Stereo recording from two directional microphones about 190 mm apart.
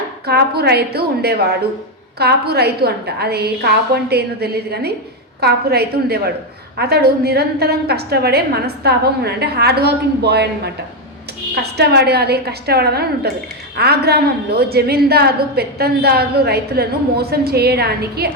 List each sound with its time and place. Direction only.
0.3 s a woman's voice: 55° right (ahead or behind)